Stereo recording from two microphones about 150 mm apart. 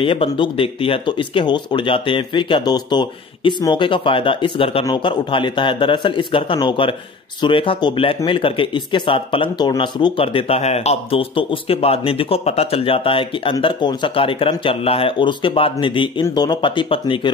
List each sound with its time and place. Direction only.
0.0 s speech: 35° left (ahead or behind)